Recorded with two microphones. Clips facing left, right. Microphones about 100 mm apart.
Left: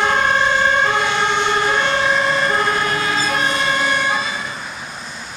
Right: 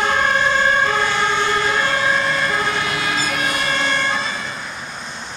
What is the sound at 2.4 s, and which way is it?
Emergency vehicle, 40° left (ahead or behind).